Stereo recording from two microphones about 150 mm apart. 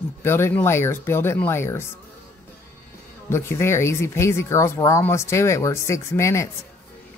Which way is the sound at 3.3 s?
15° left (ahead or behind).